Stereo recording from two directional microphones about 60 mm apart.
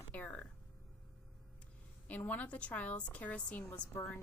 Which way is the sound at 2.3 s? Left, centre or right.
Left.